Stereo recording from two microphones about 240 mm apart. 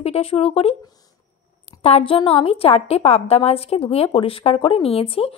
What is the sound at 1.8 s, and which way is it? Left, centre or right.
A woman's voice, left.